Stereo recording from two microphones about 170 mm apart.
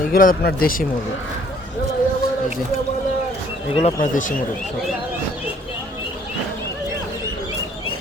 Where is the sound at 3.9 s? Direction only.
50° left (ahead or behind).